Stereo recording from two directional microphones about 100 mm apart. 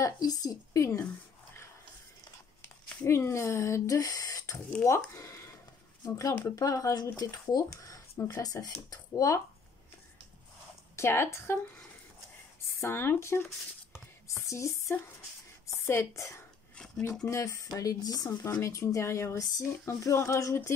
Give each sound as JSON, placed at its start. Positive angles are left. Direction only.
{"t": 0.0, "sound": "speech", "side_deg": 40}
{"t": 3.1, "sound": "speech", "side_deg": 25}
{"t": 11.0, "sound": "speech", "side_deg": 25}
{"t": 12.8, "sound": "a woman's voice", "side_deg": 25}
{"t": 16.7, "sound": "dishes", "side_deg": 5}
{"t": 17.3, "sound": "speech", "side_deg": 30}